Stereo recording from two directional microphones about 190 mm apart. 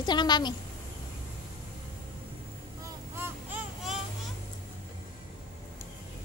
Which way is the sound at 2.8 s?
15° right (ahead or behind).